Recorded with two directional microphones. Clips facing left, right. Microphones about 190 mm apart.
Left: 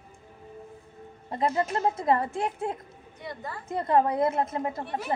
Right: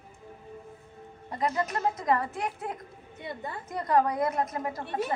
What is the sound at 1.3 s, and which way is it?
Speech, 30° left (ahead or behind).